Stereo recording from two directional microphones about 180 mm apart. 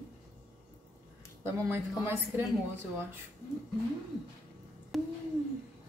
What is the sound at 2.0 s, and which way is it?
Speech, 10° right (ahead or behind).